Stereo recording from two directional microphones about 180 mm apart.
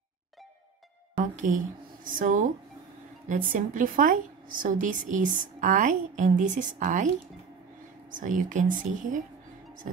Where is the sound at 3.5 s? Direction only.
50° right (ahead or behind).